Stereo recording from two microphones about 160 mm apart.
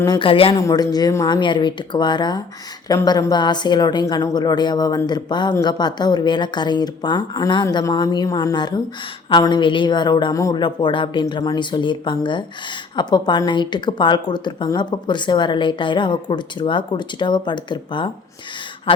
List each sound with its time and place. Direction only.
0.0 s speech: 30° left (ahead or behind)
0.5 s a woman's voice: 25° left (ahead or behind)